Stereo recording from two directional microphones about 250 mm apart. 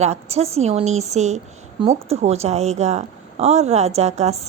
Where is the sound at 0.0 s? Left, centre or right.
Right.